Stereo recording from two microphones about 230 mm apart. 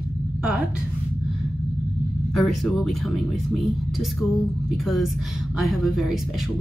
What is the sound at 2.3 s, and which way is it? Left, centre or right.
Speech, centre.